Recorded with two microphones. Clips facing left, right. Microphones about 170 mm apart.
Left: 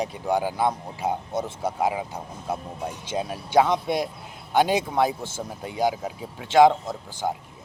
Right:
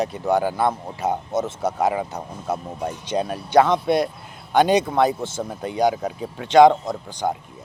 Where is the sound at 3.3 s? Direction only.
10° left (ahead or behind).